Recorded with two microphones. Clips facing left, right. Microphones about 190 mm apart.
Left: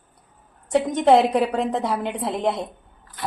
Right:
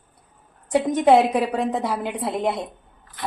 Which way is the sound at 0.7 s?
5° right (ahead or behind).